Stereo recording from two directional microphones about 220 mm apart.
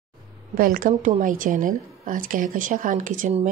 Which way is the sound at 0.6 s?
40° right (ahead or behind).